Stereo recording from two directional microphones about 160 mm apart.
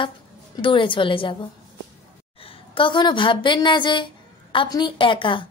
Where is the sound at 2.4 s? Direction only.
30° left (ahead or behind).